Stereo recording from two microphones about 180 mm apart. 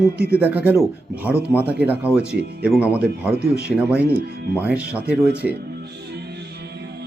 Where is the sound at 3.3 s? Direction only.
65° right (ahead or behind).